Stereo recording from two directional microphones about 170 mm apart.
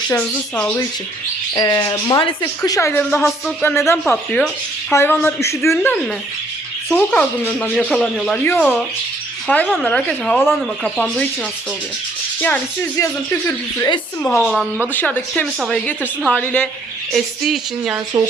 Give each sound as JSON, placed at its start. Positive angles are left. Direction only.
{"t": 0.1, "sound": "speech", "side_deg": 5}
{"t": 1.5, "sound": "speech", "side_deg": 20}
{"t": 3.0, "sound": "speech", "side_deg": 5}
{"t": 12.4, "sound": "speech", "side_deg": 10}
{"t": 13.7, "sound": "speech", "side_deg": 20}
{"t": 14.2, "sound": "speech", "side_deg": 5}
{"t": 18.1, "sound": "speech", "side_deg": -20}